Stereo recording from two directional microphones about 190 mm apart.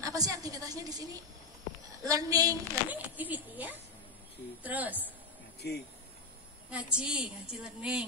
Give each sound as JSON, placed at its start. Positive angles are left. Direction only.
{"t": 0.0, "sound": "a woman's voice", "side_deg": -20}
{"t": 5.6, "sound": "speech", "side_deg": 60}
{"t": 6.7, "sound": "a woman's voice", "side_deg": -5}